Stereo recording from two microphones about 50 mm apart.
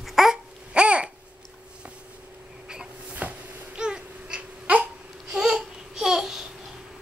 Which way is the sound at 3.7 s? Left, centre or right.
Centre.